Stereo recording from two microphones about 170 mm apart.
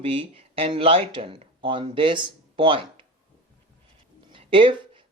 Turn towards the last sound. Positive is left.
turn(degrees=-30)  # may be behind; listen again after turning